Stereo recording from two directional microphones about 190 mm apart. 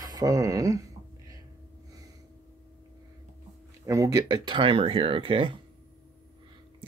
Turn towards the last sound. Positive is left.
turn(degrees=-25)  # may be behind; listen again after turning